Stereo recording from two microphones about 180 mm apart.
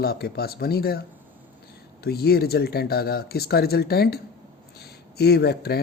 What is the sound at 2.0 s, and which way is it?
Speech, 60° left (ahead or behind).